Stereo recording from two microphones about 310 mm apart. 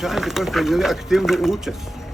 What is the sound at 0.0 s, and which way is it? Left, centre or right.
A man's voice, centre.